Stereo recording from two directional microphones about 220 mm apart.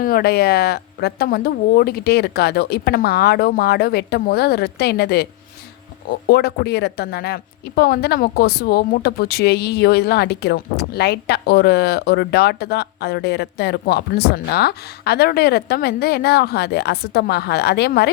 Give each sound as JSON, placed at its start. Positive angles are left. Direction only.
{"t": 0.0, "sound": "speech", "side_deg": 45}